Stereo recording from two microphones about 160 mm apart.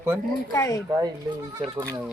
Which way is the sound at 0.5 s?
15° left (ahead or behind).